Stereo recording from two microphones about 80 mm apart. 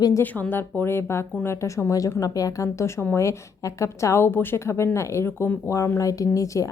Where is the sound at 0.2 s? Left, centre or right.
Left.